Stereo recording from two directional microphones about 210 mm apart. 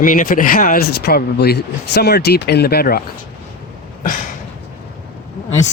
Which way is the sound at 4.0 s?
40° left (ahead or behind).